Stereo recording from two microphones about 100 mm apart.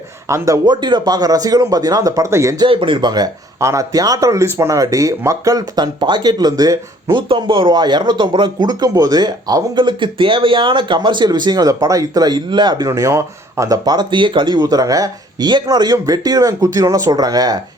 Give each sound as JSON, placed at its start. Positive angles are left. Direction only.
{"t": 0.3, "sound": "speech", "side_deg": -30}
{"t": 0.7, "sound": "speech", "side_deg": -50}
{"t": 2.6, "sound": "speech", "side_deg": -55}
{"t": 3.6, "sound": "speech", "side_deg": -30}
{"t": 7.2, "sound": "speech", "side_deg": -55}